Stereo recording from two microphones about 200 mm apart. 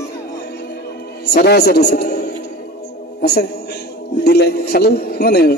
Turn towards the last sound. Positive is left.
turn(degrees=50)  # may be behind; listen again after turning